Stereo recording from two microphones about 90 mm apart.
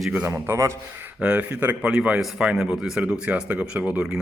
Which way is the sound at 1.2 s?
15° right (ahead or behind).